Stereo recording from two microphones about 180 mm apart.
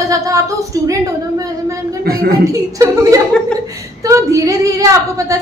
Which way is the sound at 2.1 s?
60° right (ahead or behind).